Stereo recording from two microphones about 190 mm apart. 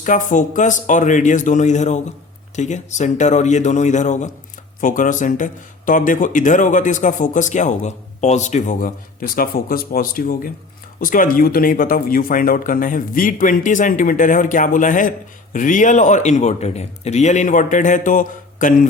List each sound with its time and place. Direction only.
0.0 s speech: 40° left (ahead or behind)